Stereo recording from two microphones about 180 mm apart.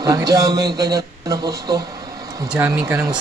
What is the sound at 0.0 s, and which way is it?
A man's voice, 20° right (ahead or behind).